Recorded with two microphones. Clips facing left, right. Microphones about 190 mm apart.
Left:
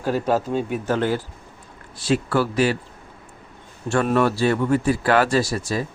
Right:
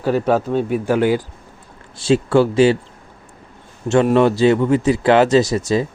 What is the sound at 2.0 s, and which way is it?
Speech, 25° right (ahead or behind).